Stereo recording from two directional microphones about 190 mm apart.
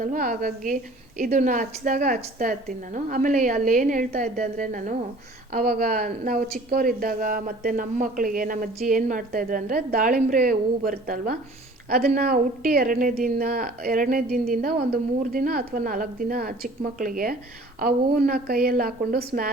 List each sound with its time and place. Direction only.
0.0 s a woman's voice: 45° right (ahead or behind)